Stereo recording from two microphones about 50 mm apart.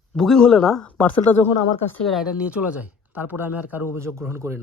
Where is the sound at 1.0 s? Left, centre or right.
Left.